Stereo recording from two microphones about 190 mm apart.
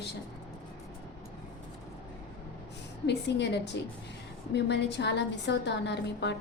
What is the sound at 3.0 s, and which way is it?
A woman's voice, 65° left (ahead or behind).